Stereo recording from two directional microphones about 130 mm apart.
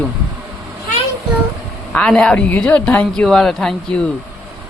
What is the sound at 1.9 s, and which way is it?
Speech, 5° left (ahead or behind).